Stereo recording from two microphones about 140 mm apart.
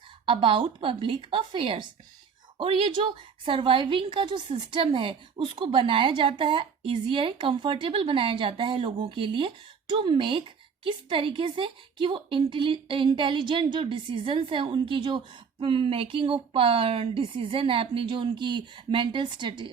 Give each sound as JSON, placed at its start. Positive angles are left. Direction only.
{"t": 0.3, "sound": "a woman's voice", "side_deg": -35}